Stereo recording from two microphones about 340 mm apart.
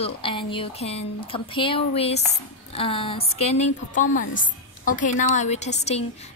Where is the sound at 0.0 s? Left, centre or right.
Centre.